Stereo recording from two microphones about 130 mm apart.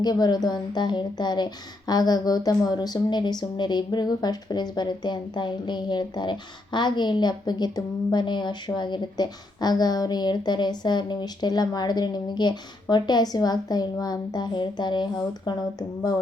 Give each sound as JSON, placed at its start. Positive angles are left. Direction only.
{"t": 0.0, "sound": "a woman's voice", "side_deg": 30}